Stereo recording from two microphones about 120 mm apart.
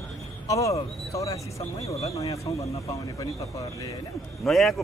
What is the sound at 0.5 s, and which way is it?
Speech, 25° left (ahead or behind).